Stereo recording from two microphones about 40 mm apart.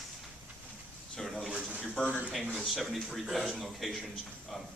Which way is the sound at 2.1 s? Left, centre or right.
Right.